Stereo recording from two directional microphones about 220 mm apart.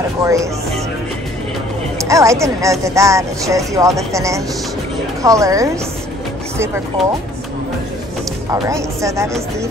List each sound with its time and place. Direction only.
0.2 s speech: 15° right (ahead or behind)
2.0 s speech: 15° right (ahead or behind)
8.5 s speech: 15° right (ahead or behind)